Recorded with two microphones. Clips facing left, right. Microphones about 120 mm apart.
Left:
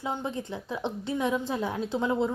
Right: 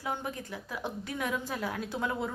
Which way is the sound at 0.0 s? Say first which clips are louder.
Left 4 dB; 20° left (ahead or behind).